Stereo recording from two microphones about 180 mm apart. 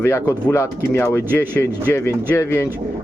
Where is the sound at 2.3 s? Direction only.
15° left (ahead or behind).